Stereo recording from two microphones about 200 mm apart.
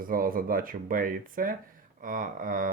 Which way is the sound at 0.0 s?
45° right (ahead or behind).